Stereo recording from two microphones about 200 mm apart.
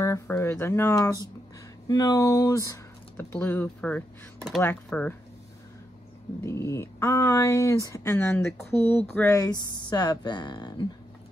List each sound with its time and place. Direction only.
0.0 s speech: 10° left (ahead or behind)
6.4 s speech: 15° left (ahead or behind)